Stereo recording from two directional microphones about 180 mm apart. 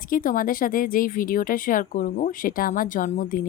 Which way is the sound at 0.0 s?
50° left (ahead or behind).